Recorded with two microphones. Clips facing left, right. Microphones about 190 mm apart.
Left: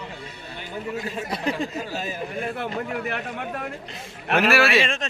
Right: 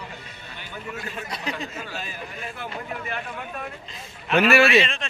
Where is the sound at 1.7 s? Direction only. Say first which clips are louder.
Left 5 dB; 35° left (ahead or behind); by 2.7 s 60° left (ahead or behind).